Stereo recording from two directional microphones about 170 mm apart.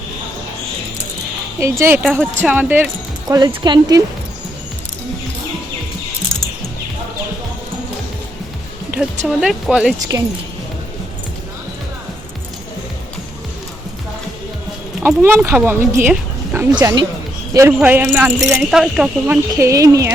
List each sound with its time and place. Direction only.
1.5 s speech: 15° right (ahead or behind)
3.2 s speech: 25° right (ahead or behind)
9.0 s speech: 5° right (ahead or behind)
10.1 s speech: 15° right (ahead or behind)
15.0 s speech: 15° right (ahead or behind)
19.5 s speech: 20° right (ahead or behind)